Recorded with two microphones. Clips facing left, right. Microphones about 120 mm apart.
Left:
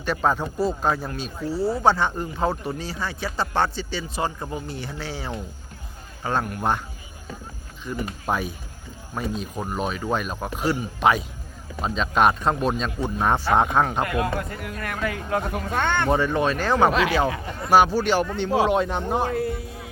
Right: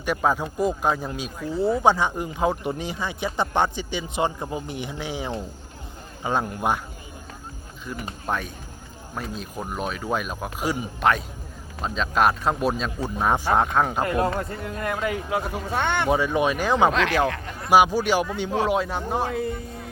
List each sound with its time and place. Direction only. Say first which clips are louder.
0.0 s speech: even; 10° right (ahead or behind)
7.9 s speech: left 2 dB; centre (ahead or behind)
14.0 s speech: right 1 dB; 30° right (ahead or behind); by 16.9 s 15° right (ahead or behind)
16.9 s speech: left 1 dB; 5° left (ahead or behind)
17.7 s speech: even; 15° right (ahead or behind); by 19.9 s 5° left (ahead or behind)